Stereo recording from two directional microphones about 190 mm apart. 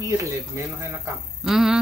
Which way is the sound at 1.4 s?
Centre (ahead or behind).